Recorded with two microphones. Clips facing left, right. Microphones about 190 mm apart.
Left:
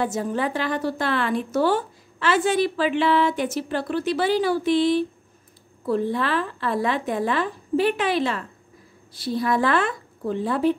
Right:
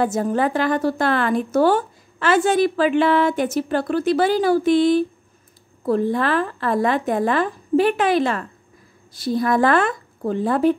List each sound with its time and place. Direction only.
0.0 s a woman's voice: 50° right (ahead or behind)